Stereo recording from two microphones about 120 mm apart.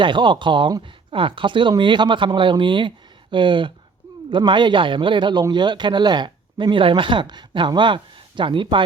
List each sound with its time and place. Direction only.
0.0 s speech: 40° right (ahead or behind)